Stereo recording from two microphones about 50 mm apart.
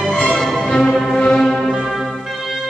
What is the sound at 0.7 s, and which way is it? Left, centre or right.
Music, centre.